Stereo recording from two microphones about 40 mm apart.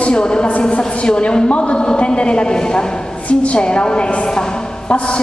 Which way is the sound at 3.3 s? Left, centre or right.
Left.